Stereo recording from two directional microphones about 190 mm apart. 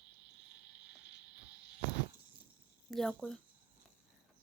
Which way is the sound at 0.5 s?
65° left (ahead or behind).